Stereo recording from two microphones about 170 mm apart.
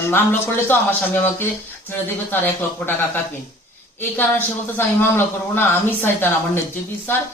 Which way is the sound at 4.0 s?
10° left (ahead or behind).